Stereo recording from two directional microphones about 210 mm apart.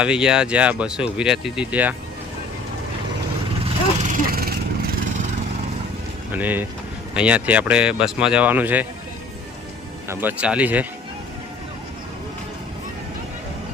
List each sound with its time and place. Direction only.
0.0 s speech: 5° right (ahead or behind)
4.1 s vehicle: 45° right (ahead or behind)
6.3 s speech: 10° right (ahead or behind)
10.1 s speech: 10° right (ahead or behind)